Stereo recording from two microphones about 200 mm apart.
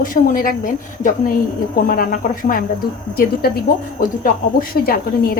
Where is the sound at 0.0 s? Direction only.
45° left (ahead or behind).